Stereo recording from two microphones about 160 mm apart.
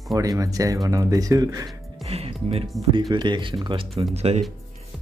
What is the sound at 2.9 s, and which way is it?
Speech, 30° right (ahead or behind).